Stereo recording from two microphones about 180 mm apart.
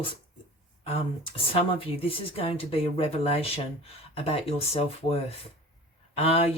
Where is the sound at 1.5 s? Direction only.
30° left (ahead or behind).